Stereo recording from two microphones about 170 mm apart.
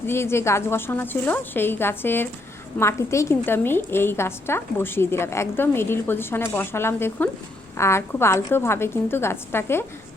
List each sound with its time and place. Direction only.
0.0 s a woman's voice: 15° left (ahead or behind)